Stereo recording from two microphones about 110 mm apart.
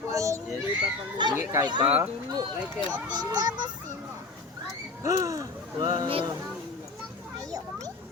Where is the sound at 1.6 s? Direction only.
45° right (ahead or behind).